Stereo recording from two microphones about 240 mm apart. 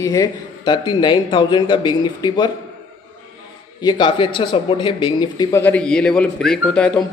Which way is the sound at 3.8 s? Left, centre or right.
Centre.